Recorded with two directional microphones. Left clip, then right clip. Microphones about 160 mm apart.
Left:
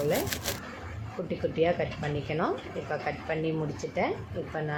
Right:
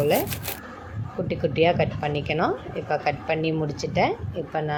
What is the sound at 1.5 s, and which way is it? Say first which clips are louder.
Speech: right 7 dB; 35° right (ahead or behind).